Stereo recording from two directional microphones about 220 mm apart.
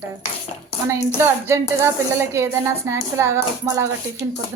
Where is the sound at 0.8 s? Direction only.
10° right (ahead or behind).